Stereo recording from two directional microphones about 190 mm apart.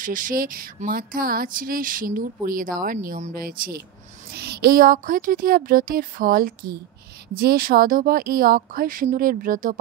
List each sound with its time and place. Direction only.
0.0 s speech: 45° right (ahead or behind)